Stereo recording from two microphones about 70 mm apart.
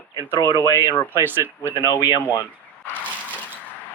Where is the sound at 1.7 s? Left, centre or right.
Left.